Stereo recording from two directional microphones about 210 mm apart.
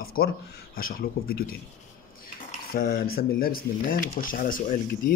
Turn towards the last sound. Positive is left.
turn(degrees=40)  # may be behind; listen again after turning